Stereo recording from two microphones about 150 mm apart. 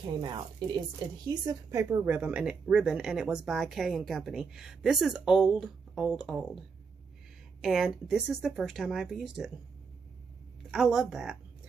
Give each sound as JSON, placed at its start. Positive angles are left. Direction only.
{"t": 0.0, "sound": "a woman's voice", "side_deg": -30}
{"t": 2.1, "sound": "a woman's voice", "side_deg": -10}
{"t": 7.6, "sound": "a woman's voice", "side_deg": -5}
{"t": 10.7, "sound": "a woman's voice", "side_deg": -5}